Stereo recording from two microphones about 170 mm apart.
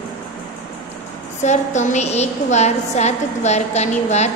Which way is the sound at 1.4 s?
45° left (ahead or behind).